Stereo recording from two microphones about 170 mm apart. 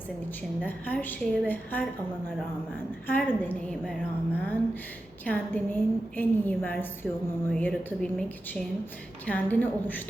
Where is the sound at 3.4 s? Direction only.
10° left (ahead or behind).